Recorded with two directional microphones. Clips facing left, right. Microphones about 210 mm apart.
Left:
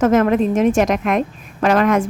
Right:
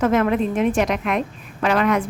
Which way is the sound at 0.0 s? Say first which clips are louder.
Left 4 dB; 45° left (ahead or behind).